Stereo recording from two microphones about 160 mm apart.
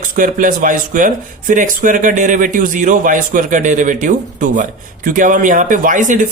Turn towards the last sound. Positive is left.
turn(degrees=-55)  # may be behind; listen again after turning